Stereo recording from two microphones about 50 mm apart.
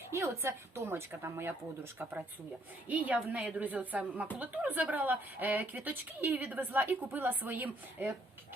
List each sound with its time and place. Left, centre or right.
0.1 s a woman's voice: right
2.9 s a woman's voice: right